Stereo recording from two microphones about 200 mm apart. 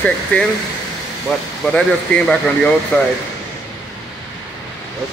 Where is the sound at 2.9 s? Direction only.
5° left (ahead or behind).